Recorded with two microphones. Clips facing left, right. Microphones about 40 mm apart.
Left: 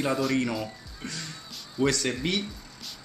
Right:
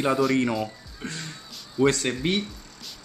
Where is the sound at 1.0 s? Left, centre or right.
Right.